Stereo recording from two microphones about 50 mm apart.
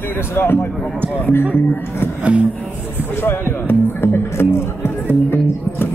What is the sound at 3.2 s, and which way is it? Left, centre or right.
Music, left.